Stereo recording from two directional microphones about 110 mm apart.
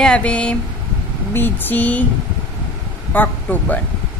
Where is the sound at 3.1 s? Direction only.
15° left (ahead or behind).